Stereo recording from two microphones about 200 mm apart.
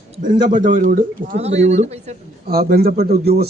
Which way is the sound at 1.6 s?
35° right (ahead or behind).